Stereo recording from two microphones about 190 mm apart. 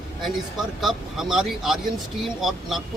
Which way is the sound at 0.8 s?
Centre (ahead or behind).